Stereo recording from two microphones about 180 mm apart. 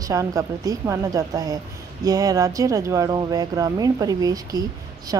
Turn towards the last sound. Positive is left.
turn(degrees=-20)  # may be behind; listen again after turning